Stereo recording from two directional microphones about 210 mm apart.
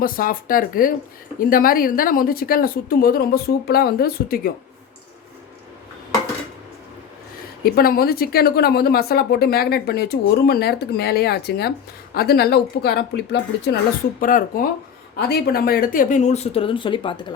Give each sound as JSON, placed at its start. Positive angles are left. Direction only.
{"t": 0.0, "sound": "a woman's voice", "side_deg": 40}
{"t": 7.6, "sound": "a woman's voice", "side_deg": 45}